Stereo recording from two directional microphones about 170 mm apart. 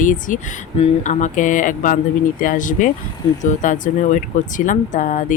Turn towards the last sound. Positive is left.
turn(degrees=45)  # may be behind; listen again after turning